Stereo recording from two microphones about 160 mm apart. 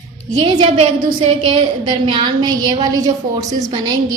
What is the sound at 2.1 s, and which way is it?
A woman's voice, 30° right (ahead or behind).